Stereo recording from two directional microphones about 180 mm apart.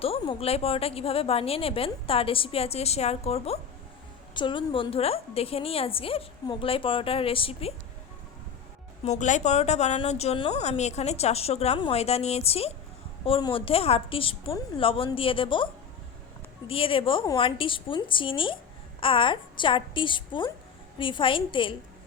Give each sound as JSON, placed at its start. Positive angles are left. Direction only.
{"t": 0.0, "sound": "a woman's voice", "side_deg": 30}
{"t": 9.0, "sound": "a woman's voice", "side_deg": 40}